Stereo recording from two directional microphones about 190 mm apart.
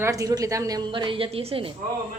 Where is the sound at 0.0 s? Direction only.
15° right (ahead or behind).